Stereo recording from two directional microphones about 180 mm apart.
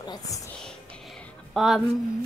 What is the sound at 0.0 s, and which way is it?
Music, 25° left (ahead or behind).